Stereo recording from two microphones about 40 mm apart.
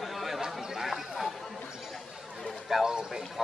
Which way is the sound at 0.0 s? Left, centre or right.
Centre.